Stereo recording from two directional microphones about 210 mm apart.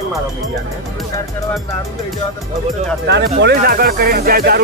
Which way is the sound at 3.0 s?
55° right (ahead or behind).